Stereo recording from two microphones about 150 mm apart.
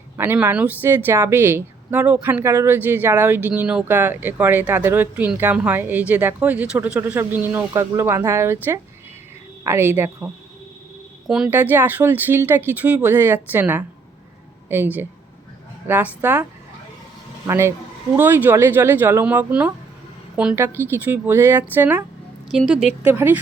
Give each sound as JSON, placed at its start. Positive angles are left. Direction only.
{"t": 0.2, "sound": "a woman's voice", "side_deg": -15}
{"t": 9.6, "sound": "a woman's voice", "side_deg": -15}
{"t": 11.3, "sound": "a woman's voice", "side_deg": -5}